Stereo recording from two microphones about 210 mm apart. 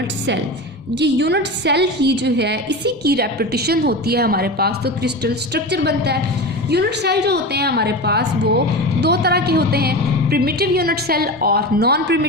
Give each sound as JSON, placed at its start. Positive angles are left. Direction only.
{"t": 0.9, "sound": "a woman's voice", "side_deg": -55}